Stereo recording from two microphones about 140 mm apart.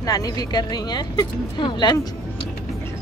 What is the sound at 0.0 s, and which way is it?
Speech, 25° left (ahead or behind).